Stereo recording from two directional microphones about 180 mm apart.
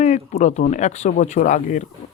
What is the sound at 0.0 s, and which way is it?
Speech, 40° left (ahead or behind).